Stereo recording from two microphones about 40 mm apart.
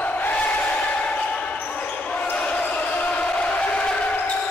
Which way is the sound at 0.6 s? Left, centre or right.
Left.